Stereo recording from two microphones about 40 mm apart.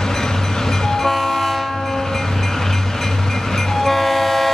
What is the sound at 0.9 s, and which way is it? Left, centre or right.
Train, centre.